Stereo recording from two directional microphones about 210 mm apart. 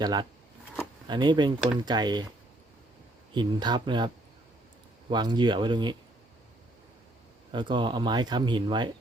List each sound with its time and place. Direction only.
0.0 s speech: 20° right (ahead or behind)
3.3 s speech: 20° right (ahead or behind)
7.5 s speech: 20° right (ahead or behind)